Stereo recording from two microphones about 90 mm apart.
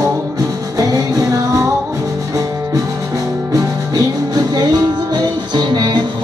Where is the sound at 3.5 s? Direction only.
45° right (ahead or behind).